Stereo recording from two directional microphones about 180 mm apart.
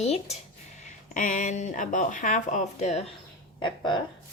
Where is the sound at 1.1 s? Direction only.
45° left (ahead or behind).